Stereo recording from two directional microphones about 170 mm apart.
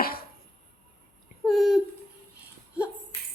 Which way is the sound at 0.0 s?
60° left (ahead or behind).